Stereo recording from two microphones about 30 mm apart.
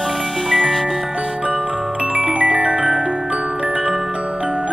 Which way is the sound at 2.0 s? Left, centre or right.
Right.